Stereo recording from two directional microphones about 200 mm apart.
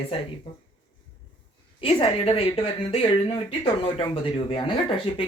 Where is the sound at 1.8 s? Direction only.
25° left (ahead or behind).